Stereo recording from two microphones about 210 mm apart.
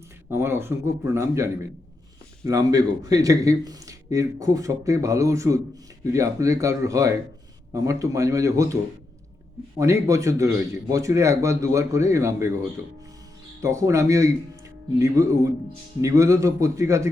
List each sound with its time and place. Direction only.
0.3 s speech: 10° right (ahead or behind)
13.6 s speech: 15° right (ahead or behind)